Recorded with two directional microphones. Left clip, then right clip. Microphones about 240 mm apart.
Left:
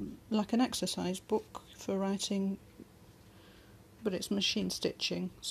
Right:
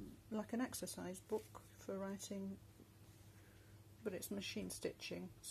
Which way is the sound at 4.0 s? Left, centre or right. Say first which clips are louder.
Left 13 dB; left.